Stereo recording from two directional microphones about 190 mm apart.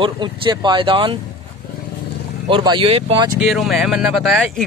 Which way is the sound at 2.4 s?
25° right (ahead or behind).